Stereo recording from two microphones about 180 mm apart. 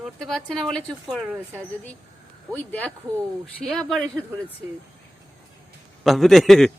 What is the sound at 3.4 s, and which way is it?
Speech, 5° left (ahead or behind).